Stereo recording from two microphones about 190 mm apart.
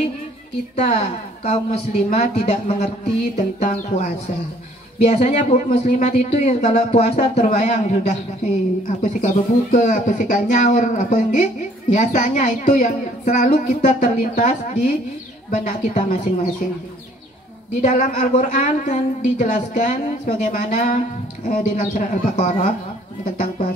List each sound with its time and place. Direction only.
0.7 s speech: 35° left (ahead or behind)
17.8 s speech: 40° left (ahead or behind)